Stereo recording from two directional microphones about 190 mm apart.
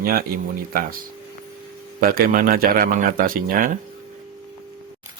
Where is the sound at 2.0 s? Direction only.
50° right (ahead or behind).